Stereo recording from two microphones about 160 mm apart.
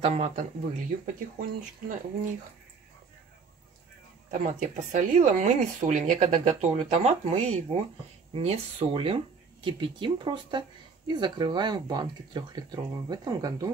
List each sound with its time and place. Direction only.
0.0 s speech: 45° right (ahead or behind)
4.3 s speech: 55° right (ahead or behind); by 13.7 s 25° right (ahead or behind)